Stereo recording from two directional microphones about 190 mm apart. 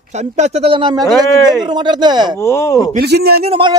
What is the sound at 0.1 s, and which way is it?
Speech, 35° right (ahead or behind).